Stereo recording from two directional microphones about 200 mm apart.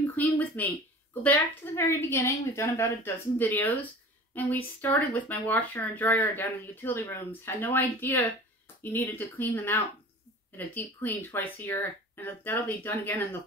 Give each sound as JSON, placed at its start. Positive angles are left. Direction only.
{"t": 0.0, "sound": "speech", "side_deg": 10}